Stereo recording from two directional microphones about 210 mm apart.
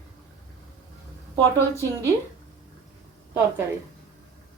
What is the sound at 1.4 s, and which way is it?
Speech, 10° left (ahead or behind).